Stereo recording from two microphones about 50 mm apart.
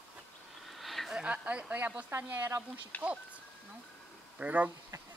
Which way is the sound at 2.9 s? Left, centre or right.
Left.